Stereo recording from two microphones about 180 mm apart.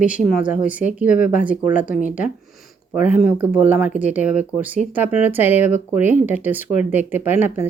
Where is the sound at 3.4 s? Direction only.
10° right (ahead or behind).